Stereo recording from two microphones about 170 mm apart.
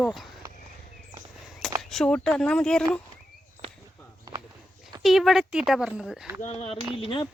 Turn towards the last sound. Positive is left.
turn(degrees=30)  # may be behind; listen again after turning